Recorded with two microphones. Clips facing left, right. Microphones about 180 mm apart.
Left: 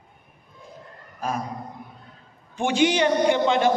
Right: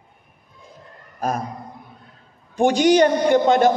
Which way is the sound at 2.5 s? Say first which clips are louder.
Right 6 dB; 40° right (ahead or behind).